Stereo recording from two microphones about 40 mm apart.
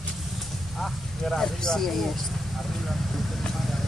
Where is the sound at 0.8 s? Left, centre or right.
Centre.